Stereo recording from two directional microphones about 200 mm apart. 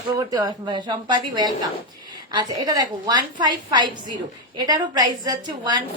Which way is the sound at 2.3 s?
20° right (ahead or behind).